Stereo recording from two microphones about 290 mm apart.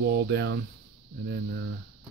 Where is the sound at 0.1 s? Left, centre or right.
Right.